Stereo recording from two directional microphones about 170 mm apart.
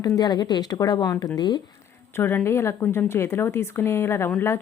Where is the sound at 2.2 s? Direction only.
15° left (ahead or behind).